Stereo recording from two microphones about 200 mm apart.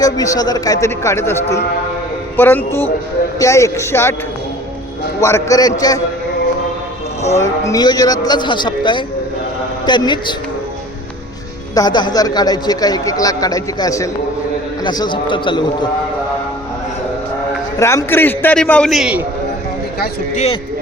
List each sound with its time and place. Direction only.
0.0 s a man's voice: 20° left (ahead or behind)
5.2 s a man's voice: 15° left (ahead or behind)
7.3 s a man's voice: 15° left (ahead or behind)
11.7 s a man's voice: 20° left (ahead or behind)
17.7 s a man's voice: 15° left (ahead or behind); by 19.2 s centre (ahead or behind)
20.3 s a man's voice: 30° left (ahead or behind)